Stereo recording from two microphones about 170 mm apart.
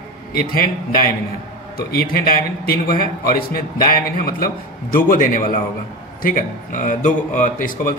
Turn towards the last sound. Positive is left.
turn(degrees=55)  # may be behind; listen again after turning